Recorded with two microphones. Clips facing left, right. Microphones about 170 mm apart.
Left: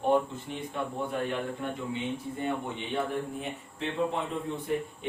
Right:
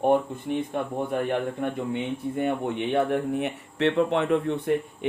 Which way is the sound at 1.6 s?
55° right (ahead or behind).